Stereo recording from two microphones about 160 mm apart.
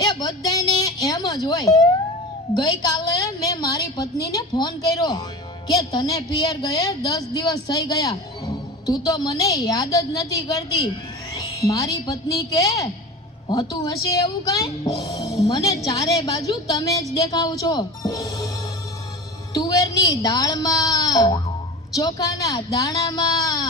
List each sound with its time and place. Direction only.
0.0 s a sound: 25° left (ahead or behind)
2.6 s a woman's voice: 25° left (ahead or behind)
19.5 s a woman's voice: 25° left (ahead or behind)